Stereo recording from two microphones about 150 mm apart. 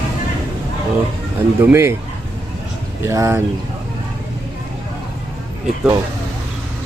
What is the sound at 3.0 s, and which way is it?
Speech, 20° right (ahead or behind).